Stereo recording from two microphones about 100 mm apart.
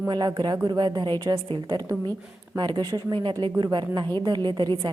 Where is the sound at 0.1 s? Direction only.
45° right (ahead or behind).